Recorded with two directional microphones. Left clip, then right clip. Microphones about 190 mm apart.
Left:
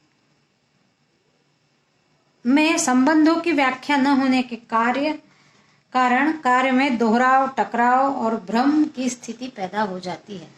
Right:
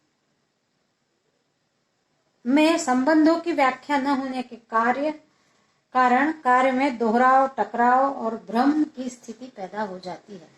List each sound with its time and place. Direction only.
2.4 s speech: 30° left (ahead or behind)
6.0 s speech: 35° left (ahead or behind)